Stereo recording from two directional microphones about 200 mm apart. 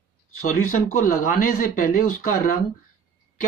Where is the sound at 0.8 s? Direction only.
40° left (ahead or behind).